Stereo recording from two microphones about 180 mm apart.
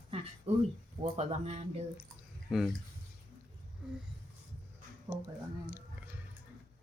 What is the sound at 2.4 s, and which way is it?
Speech, centre (ahead or behind).